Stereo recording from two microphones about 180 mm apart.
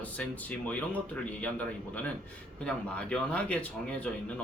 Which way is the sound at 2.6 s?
5° left (ahead or behind).